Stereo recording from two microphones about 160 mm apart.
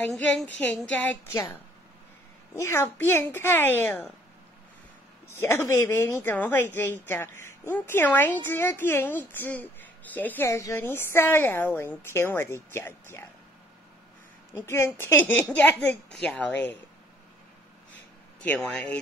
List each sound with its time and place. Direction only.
0.0 s a woman's voice: 5° left (ahead or behind)
1.3 s a woman's voice: 20° left (ahead or behind)
5.3 s a woman's voice: 15° left (ahead or behind)
14.5 s a woman's voice: 15° left (ahead or behind)
18.4 s a woman's voice: 5° left (ahead or behind)